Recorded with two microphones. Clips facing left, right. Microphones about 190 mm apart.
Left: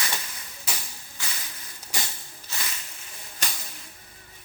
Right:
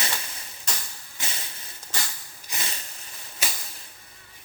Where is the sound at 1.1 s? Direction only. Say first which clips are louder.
Right 2 dB; 25° right (ahead or behind).